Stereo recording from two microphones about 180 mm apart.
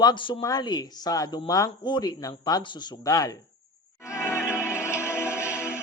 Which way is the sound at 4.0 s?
15° left (ahead or behind).